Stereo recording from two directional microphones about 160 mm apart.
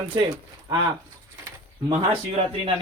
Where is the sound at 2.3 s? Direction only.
35° right (ahead or behind).